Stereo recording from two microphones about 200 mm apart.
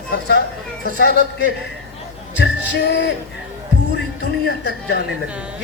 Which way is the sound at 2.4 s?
60° left (ahead or behind).